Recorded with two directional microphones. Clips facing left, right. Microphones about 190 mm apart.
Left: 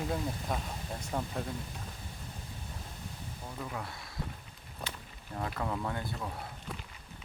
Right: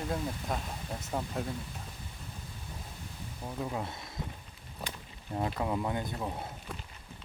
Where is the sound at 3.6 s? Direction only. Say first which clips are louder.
Right 5 dB; 20° right (ahead or behind).